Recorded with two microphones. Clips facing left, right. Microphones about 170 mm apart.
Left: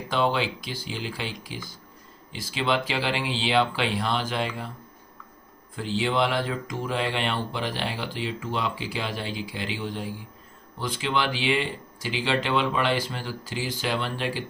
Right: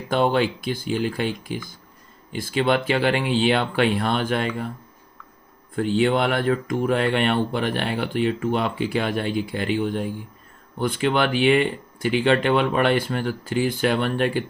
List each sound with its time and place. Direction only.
0.1 s speech: 50° right (ahead or behind)
5.7 s speech: 55° right (ahead or behind)